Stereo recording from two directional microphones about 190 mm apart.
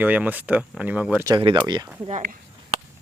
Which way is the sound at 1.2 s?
25° right (ahead or behind).